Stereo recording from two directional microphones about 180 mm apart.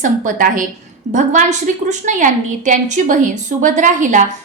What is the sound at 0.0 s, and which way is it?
A woman's voice, 45° right (ahead or behind).